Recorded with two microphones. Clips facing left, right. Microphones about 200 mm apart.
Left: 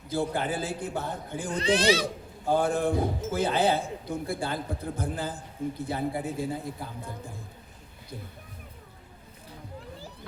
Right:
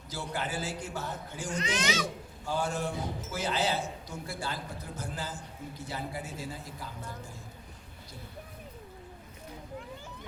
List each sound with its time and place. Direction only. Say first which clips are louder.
0.1 s a man's voice: left 7 dB; 55° left (ahead or behind)
1.5 s speech: left 8 dB; 35° left (ahead or behind)
2.5 s a man's voice: left 7 dB; 55° left (ahead or behind)